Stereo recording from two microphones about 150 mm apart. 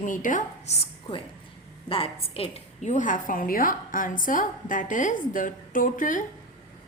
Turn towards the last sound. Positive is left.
turn(degrees=60)  # may be behind; listen again after turning